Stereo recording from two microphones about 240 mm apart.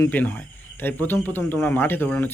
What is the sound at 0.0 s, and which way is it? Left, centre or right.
Speech, centre.